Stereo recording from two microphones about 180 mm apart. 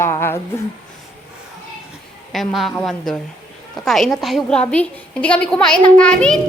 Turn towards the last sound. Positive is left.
turn(degrees=5)  # may be behind; listen again after turning